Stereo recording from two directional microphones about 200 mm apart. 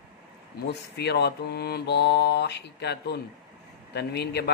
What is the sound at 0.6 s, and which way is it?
A man's voice, 55° left (ahead or behind).